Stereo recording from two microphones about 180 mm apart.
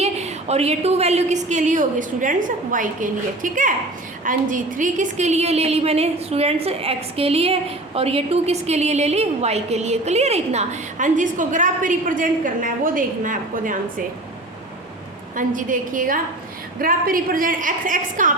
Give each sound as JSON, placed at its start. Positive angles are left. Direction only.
{"t": 0.0, "sound": "a woman's voice", "side_deg": -40}
{"t": 15.4, "sound": "a woman's voice", "side_deg": -50}